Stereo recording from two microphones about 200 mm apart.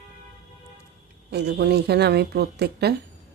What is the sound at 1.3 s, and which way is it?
Speech, 55° right (ahead or behind).